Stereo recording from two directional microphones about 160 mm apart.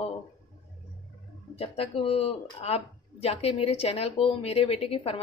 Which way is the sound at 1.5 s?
40° left (ahead or behind).